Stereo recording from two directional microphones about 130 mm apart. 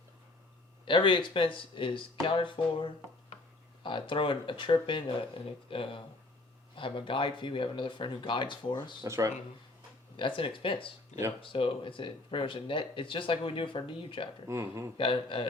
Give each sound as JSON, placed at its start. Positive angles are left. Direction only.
{"t": 0.9, "sound": "speech", "side_deg": 40}
{"t": 9.0, "sound": "speech", "side_deg": -20}
{"t": 10.2, "sound": "speech", "side_deg": 40}
{"t": 14.4, "sound": "speech", "side_deg": -20}
{"t": 14.9, "sound": "a man's voice", "side_deg": 40}